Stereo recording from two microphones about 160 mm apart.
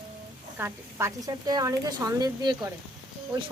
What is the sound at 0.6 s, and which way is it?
A woman's voice, 15° right (ahead or behind).